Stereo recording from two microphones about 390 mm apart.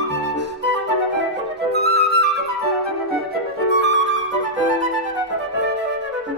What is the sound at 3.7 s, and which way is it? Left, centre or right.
Flute, right.